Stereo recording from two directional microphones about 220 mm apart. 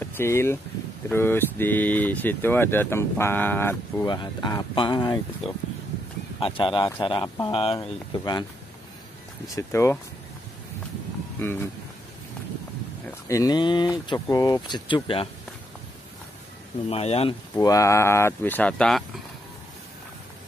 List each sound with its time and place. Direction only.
0.0 s speech: 10° left (ahead or behind)
9.6 s speech: 10° left (ahead or behind)
11.3 s speech: 10° left (ahead or behind)
13.3 s speech: 15° left (ahead or behind)
16.9 s speech: 25° left (ahead or behind)
17.6 s speech: 15° left (ahead or behind)